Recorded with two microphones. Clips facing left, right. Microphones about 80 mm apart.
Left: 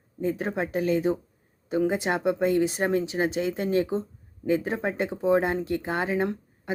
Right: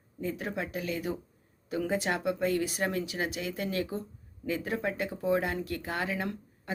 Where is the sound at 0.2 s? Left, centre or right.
Left.